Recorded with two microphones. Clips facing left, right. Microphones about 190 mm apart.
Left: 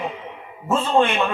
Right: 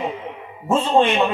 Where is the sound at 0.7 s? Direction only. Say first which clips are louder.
Right 2 dB; 20° right (ahead or behind).